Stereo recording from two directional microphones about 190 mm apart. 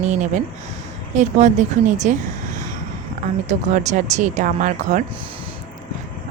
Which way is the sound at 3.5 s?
40° right (ahead or behind).